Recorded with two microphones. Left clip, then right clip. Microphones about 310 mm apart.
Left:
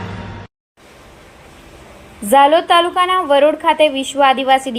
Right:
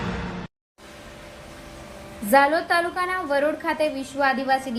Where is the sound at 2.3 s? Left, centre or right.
Left.